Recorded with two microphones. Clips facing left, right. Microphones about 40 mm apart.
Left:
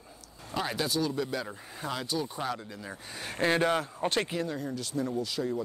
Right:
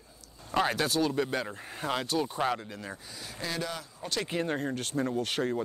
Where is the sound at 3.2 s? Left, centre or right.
Left.